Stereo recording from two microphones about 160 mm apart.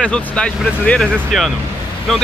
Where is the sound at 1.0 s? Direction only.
5° right (ahead or behind).